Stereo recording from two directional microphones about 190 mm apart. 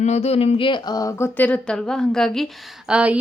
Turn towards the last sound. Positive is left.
turn(degrees=-5)  # may be behind; listen again after turning